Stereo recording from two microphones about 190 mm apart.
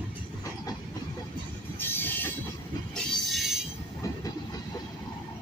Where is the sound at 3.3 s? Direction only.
Centre (ahead or behind).